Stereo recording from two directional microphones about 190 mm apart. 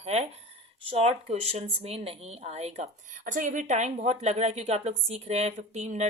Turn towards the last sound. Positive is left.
turn(degrees=-35)  # may be behind; listen again after turning